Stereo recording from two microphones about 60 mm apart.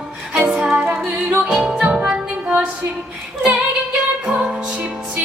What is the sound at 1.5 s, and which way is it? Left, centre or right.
Music, centre.